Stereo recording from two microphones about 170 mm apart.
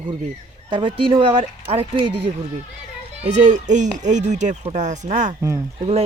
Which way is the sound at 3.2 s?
45° right (ahead or behind).